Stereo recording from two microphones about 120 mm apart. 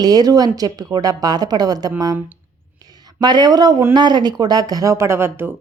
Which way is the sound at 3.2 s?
35° right (ahead or behind).